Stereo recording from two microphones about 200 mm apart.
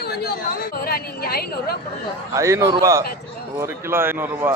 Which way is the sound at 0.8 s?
50° left (ahead or behind).